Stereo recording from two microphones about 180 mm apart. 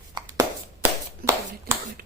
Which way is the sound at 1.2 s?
55° right (ahead or behind).